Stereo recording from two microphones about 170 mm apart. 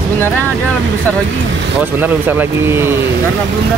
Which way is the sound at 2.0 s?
10° right (ahead or behind).